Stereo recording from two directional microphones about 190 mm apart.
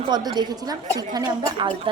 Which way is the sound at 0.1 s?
20° right (ahead or behind).